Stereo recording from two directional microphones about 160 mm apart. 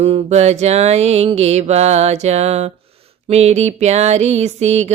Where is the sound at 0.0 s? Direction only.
40° right (ahead or behind).